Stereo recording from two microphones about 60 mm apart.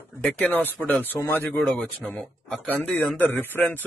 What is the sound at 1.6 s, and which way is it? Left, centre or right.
Speech, centre.